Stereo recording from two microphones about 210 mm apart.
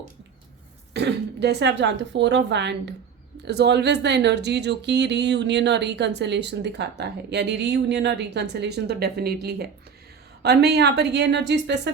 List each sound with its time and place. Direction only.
0.9 s a woman's voice: 55° right (ahead or behind)